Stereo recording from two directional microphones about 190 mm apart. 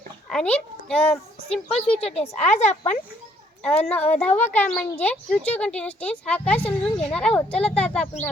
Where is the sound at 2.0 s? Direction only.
30° left (ahead or behind).